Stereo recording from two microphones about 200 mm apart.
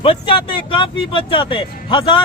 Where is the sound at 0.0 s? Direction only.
25° left (ahead or behind).